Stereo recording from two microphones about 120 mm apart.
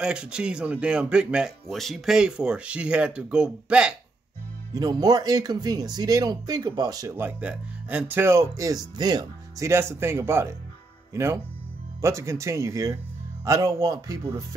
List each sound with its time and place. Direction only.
0.0 s speech: 5° right (ahead or behind)
4.7 s speech: 35° right (ahead or behind)
7.2 s speech: 15° right (ahead or behind); by 9.7 s 35° right (ahead or behind)
9.7 s speech: 20° right (ahead or behind)
12.0 s speech: 25° right (ahead or behind)